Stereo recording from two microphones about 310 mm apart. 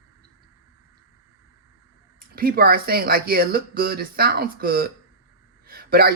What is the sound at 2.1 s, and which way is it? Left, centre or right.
Speech, right.